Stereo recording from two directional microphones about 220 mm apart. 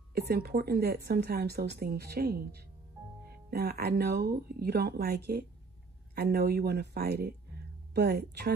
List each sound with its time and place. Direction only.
0.1 s speech: 45° right (ahead or behind)